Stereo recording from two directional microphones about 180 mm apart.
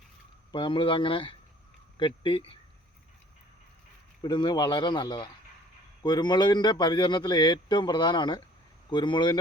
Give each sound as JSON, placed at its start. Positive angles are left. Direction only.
{"t": 0.5, "sound": "a man's voice", "side_deg": 25}
{"t": 4.2, "sound": "a man's voice", "side_deg": 25}